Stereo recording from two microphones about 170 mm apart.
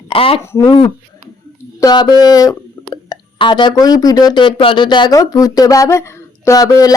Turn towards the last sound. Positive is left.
turn(degrees=20)  # may be behind; listen again after turning